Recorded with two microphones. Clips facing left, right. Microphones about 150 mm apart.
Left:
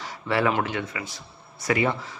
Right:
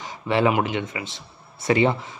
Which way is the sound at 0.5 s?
15° right (ahead or behind).